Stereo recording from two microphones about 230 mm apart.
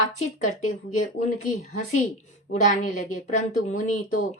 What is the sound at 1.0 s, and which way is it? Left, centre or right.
Speech, left.